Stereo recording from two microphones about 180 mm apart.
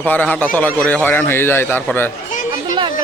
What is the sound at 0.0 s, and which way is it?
A man's voice, 10° left (ahead or behind).